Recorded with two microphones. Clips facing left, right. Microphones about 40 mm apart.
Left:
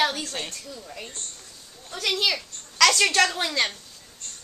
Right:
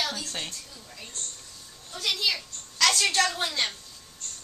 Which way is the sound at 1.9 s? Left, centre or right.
Left.